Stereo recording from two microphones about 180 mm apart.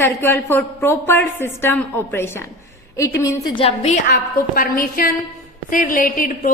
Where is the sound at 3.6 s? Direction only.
35° left (ahead or behind).